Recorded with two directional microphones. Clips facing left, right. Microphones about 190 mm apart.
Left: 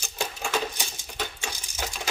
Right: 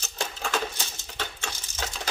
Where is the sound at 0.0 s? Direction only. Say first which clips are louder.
Left 1 dB; 10° left (ahead or behind).